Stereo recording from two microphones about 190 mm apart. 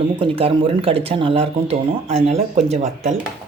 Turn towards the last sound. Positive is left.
turn(degrees=-35)  # may be behind; listen again after turning